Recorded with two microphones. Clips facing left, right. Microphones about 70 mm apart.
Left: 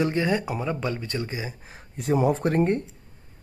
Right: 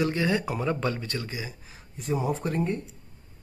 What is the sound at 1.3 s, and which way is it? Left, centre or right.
Speech, left.